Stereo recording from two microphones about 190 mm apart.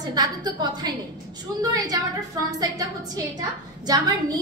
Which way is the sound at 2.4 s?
20° right (ahead or behind).